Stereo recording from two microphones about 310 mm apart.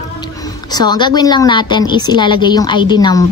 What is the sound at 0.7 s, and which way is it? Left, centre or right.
A woman's voice, centre.